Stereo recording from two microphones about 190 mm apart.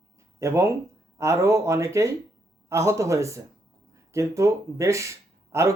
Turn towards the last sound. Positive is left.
turn(degrees=-15)  # may be behind; listen again after turning